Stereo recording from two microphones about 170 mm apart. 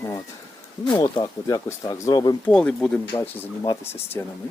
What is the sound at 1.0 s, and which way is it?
Speech, 25° left (ahead or behind).